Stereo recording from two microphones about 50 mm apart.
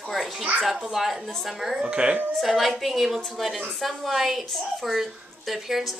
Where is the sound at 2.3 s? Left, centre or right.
Centre.